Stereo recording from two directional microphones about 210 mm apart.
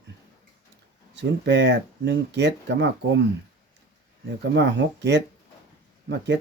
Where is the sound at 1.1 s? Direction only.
55° right (ahead or behind).